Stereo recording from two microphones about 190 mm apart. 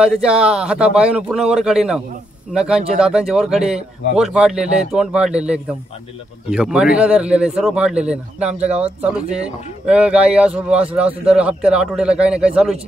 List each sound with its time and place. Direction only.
0.0 s speech: 5° right (ahead or behind)
8.5 s speech: 35° right (ahead or behind)
8.8 s speech: 5° right (ahead or behind)